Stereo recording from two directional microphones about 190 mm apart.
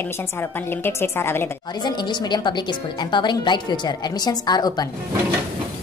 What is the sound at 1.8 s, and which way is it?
Speech, 20° left (ahead or behind).